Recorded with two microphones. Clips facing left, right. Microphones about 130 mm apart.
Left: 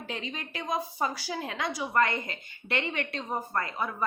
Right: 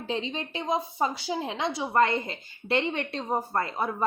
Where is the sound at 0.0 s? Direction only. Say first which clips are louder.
Right 6 dB; 30° right (ahead or behind).